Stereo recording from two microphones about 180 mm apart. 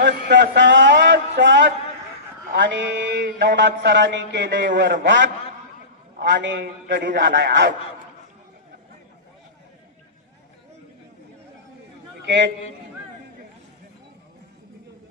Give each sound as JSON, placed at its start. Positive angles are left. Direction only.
{"t": 0.0, "sound": "a sound", "side_deg": -80}
{"t": 2.5, "sound": "mantra", "side_deg": -80}
{"t": 6.1, "sound": "a man's voice", "side_deg": -75}
{"t": 12.3, "sound": "a man's voice", "side_deg": -75}